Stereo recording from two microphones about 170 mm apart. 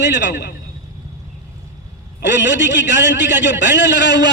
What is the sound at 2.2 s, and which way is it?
A man's voice, 90° left.